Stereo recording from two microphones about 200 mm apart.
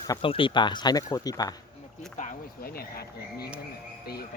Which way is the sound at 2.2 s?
45° left (ahead or behind).